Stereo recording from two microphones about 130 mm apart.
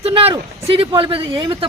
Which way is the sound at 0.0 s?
45° right (ahead or behind).